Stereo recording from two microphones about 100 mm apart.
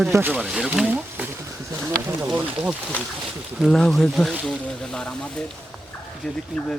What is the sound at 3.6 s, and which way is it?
Speech, 5° left (ahead or behind).